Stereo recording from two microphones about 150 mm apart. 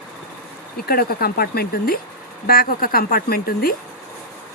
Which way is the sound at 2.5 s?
80° left.